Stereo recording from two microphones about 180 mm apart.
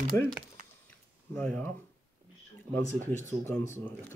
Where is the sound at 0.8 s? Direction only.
5° left (ahead or behind).